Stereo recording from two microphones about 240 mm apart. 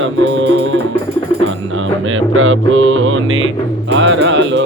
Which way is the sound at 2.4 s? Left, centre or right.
Right.